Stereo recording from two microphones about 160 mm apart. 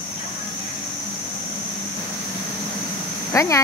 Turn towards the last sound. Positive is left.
turn(degrees=20)  # may be behind; listen again after turning